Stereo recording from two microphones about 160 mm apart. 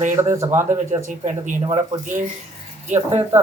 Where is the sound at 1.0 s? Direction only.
50° right (ahead or behind).